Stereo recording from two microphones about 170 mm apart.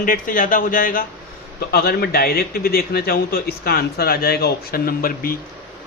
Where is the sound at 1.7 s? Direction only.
65° left (ahead or behind).